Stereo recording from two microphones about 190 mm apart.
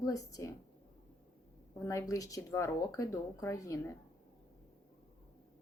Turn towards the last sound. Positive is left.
turn(degrees=15)  # may be behind; listen again after turning